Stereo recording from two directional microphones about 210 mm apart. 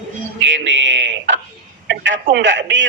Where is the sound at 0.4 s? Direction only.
65° right (ahead or behind).